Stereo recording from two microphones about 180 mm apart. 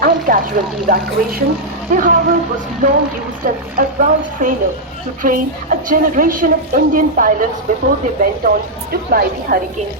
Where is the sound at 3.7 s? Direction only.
50° right (ahead or behind).